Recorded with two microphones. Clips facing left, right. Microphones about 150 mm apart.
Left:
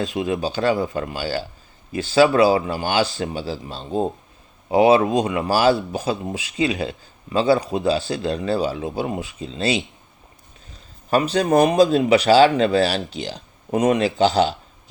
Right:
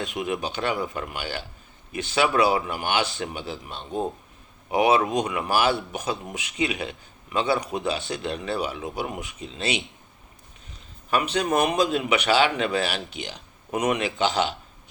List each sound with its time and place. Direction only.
0.0 s a man's voice: 30° left (ahead or behind)
11.1 s a man's voice: 35° left (ahead or behind)